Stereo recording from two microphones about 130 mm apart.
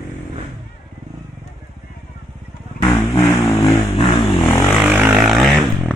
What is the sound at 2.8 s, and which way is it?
Vehicle, 25° left (ahead or behind).